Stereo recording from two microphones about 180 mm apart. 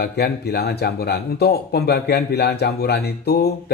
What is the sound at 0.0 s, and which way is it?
Speech, 65° left (ahead or behind).